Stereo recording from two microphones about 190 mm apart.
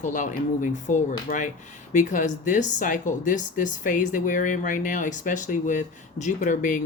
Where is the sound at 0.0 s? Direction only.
45° left (ahead or behind).